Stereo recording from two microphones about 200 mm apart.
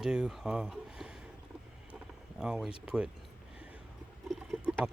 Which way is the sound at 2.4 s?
5° right (ahead or behind).